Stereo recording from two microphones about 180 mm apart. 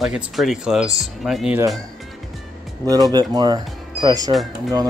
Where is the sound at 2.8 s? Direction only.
20° right (ahead or behind).